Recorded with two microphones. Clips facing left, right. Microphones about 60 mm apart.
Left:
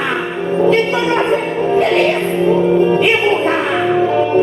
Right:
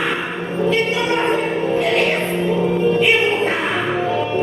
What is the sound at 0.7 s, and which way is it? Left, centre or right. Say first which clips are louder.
Music: left 3 dB; left.